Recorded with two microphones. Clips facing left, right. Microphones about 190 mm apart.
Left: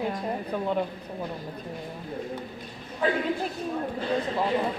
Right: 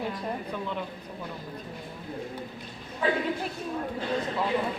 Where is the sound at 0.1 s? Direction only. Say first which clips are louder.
Left 3 dB; 45° left (ahead or behind).